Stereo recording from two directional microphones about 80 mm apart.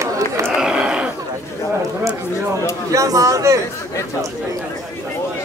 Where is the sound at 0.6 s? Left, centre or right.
Centre.